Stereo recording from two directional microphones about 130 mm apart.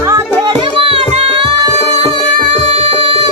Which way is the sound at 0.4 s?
40° right (ahead or behind).